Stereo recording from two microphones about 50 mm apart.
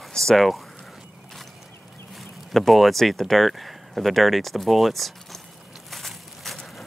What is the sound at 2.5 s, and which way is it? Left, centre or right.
Speech, centre.